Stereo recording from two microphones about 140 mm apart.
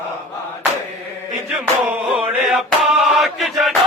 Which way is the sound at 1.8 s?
5° right (ahead or behind).